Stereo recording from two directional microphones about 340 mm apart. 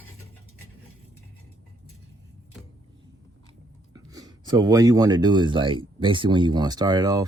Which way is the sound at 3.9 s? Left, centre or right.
Centre.